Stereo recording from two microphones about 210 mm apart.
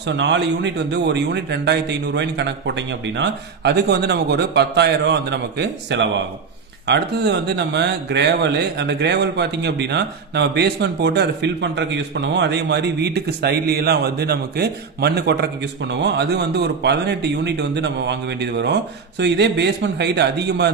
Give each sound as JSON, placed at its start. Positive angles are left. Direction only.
{"t": 0.0, "sound": "speech", "side_deg": -55}